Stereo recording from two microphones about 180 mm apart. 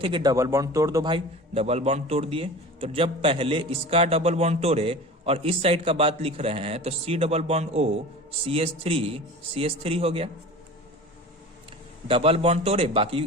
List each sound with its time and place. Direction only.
0.0 s a man's voice: 25° right (ahead or behind)
12.0 s a man's voice: 30° right (ahead or behind)